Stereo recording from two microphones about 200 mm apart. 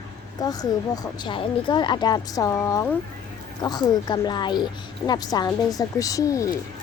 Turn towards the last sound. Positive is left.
turn(degrees=15)  # may be behind; listen again after turning